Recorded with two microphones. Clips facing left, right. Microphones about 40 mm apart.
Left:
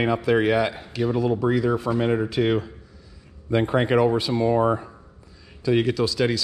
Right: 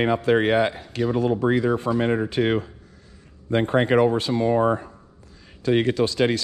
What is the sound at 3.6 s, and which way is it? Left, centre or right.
Speech, right.